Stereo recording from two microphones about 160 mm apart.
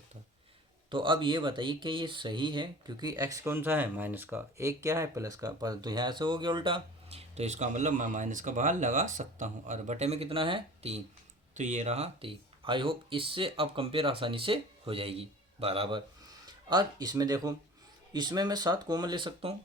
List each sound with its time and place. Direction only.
0.9 s speech: 30° right (ahead or behind)
11.5 s speech: 50° right (ahead or behind)